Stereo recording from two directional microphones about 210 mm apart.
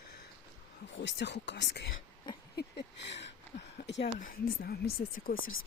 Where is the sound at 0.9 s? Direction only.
60° left (ahead or behind).